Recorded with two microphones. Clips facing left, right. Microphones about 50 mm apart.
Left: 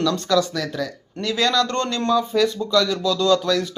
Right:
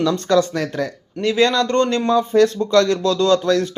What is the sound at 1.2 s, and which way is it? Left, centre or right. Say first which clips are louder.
Speech: right 4 dB; right.